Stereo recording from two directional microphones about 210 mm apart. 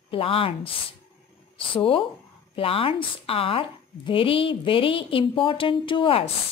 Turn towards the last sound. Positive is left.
turn(degrees=25)  # may be behind; listen again after turning